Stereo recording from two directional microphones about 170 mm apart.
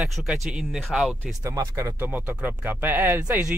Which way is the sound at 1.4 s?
20° right (ahead or behind).